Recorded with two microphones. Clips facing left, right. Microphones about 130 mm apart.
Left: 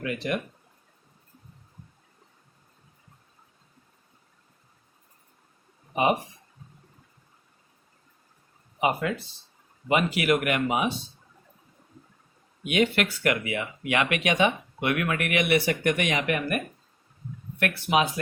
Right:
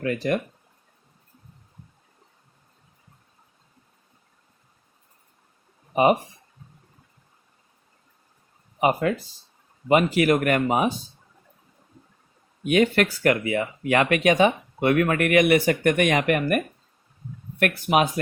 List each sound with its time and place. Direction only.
0.0 s speech: 35° right (ahead or behind)
5.9 s speech: 35° right (ahead or behind)
8.8 s speech: 35° right (ahead or behind)
12.6 s speech: 40° right (ahead or behind)
17.6 s speech: 40° right (ahead or behind)